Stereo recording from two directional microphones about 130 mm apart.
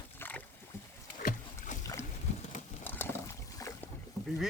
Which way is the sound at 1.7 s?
75° left (ahead or behind).